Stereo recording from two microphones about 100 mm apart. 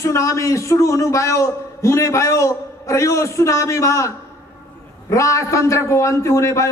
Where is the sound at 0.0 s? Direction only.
30° left (ahead or behind).